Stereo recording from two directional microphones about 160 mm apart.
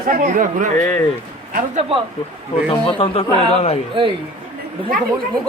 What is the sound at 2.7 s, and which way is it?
A man's voice, 35° left (ahead or behind).